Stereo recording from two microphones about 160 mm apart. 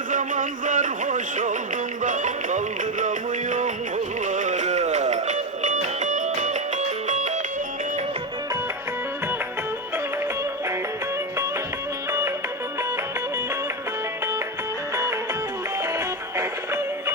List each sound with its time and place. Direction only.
0.1 s music: 55° right (ahead or behind)
15.8 s music: 20° right (ahead or behind)